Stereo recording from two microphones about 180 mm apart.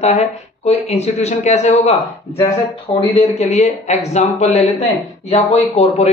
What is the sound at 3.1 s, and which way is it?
Speech, 40° left (ahead or behind).